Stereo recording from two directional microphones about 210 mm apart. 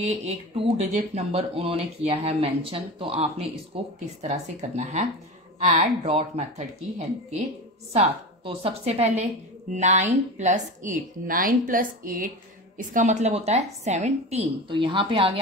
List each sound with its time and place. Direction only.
0.0 s a woman's voice: 30° right (ahead or behind)